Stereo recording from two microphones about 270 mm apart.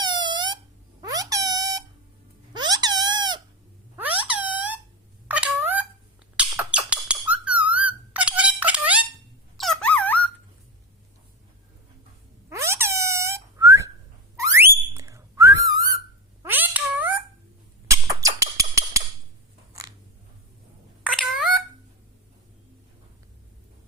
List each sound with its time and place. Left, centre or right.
0.0 s wail: centre
1.0 s a sound: centre
2.5 s squeak: centre
3.9 s a sound: centre
5.3 s cat: centre
6.3 s squeak: centre
9.6 s dog: centre
12.5 s whistling: centre
14.3 s a sound: centre
14.9 s whistling: centre
16.4 s boing: centre
17.8 s a sound: centre